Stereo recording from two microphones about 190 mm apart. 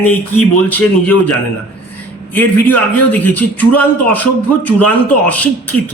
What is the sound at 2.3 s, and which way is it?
Speech, 10° left (ahead or behind).